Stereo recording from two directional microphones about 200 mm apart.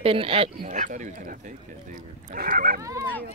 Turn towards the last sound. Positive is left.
turn(degrees=-15)  # may be behind; listen again after turning